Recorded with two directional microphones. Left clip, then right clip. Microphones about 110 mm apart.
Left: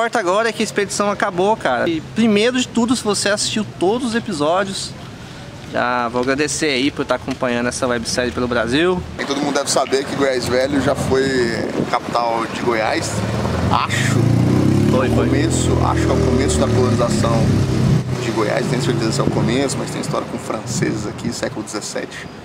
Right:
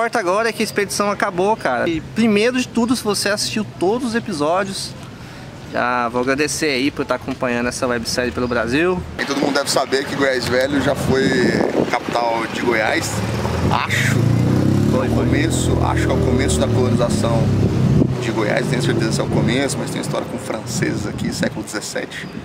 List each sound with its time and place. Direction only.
0.0 s speech: 5° left (ahead or behind)
5.8 s speech: 5° left (ahead or behind)
14.9 s speech: 35° left (ahead or behind)
15.3 s speech: centre (ahead or behind)